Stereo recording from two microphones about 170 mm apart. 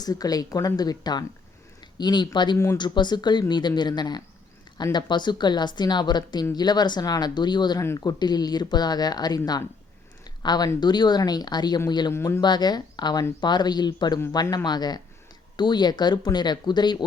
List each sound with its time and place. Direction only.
0.0 s a woman's voice: 20° left (ahead or behind)
10.4 s a woman's voice: 25° left (ahead or behind)
12.1 s speech: 15° left (ahead or behind)
12.4 s a woman's voice: 25° left (ahead or behind)